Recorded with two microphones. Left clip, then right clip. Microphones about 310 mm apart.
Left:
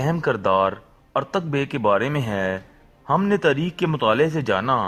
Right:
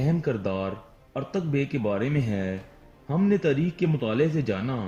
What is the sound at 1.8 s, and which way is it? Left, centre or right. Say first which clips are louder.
Speech: left 8 dB; left.